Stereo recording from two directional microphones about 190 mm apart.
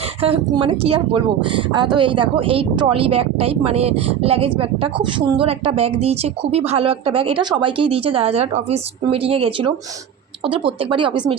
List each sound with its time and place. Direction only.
0.2 s speech: 30° right (ahead or behind)
10.8 s speech: 25° right (ahead or behind)